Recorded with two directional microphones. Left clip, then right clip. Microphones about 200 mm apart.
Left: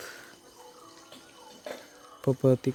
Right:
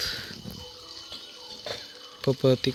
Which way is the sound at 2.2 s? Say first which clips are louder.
Right 2 dB; 5° left (ahead or behind).